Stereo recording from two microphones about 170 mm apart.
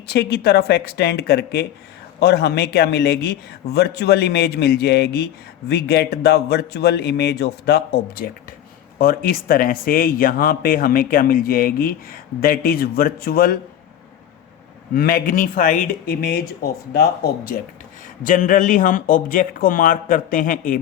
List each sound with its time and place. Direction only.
0.1 s a man's voice: 70° left (ahead or behind)
14.9 s speech: 60° left (ahead or behind)
18.2 s speech: 50° left (ahead or behind)